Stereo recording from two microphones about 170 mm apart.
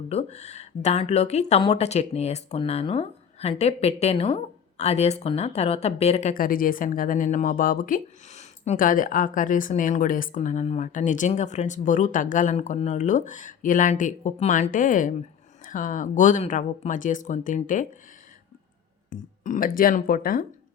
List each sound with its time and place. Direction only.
0.1 s speech: 40° left (ahead or behind)
6.3 s a woman's voice: 55° left (ahead or behind)
19.1 s speech: 55° left (ahead or behind)